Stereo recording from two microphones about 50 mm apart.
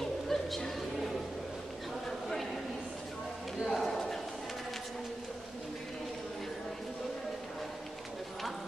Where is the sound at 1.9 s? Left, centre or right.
Centre.